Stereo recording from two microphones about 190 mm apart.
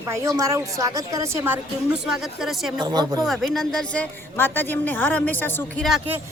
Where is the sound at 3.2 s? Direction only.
Centre (ahead or behind).